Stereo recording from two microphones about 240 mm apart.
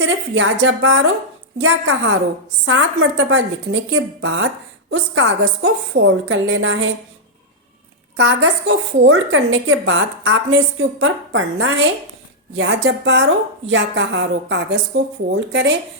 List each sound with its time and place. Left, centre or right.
0.0 s a woman's voice: right
8.1 s a woman's voice: right